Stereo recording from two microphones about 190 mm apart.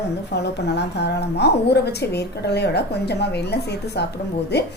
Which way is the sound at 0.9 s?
60° left (ahead or behind).